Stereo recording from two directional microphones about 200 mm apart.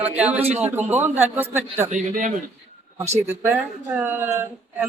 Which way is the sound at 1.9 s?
40° right (ahead or behind).